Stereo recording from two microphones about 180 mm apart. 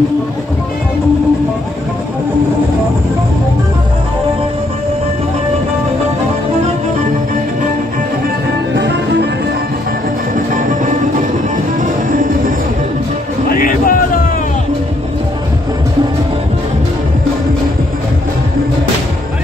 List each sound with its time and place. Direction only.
13.5 s music: 50° left (ahead or behind)